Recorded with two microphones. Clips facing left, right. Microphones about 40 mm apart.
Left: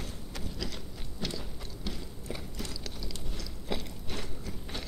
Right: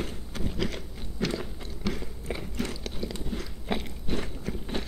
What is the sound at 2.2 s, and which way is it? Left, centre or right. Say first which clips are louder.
Biting: right 7 dB; right.